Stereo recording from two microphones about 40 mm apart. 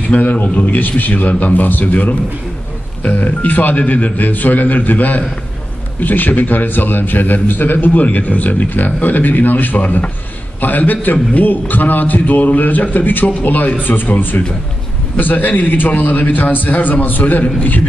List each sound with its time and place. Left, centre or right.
0.2 s a man's voice: left